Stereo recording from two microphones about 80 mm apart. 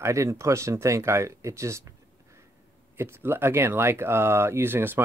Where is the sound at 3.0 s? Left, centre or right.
Right.